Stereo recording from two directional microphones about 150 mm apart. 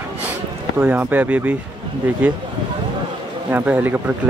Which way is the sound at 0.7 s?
10° right (ahead or behind).